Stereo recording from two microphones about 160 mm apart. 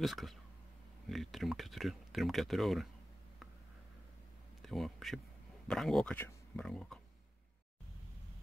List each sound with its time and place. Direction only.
0.0 s speech: centre (ahead or behind)
4.6 s speech: centre (ahead or behind)